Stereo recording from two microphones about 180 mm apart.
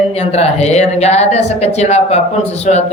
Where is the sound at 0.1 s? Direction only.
35° left (ahead or behind).